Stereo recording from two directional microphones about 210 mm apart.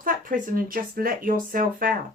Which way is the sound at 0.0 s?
40° right (ahead or behind).